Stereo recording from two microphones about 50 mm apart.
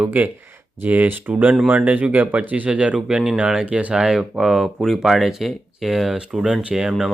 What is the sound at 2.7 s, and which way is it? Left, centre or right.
Speech, right.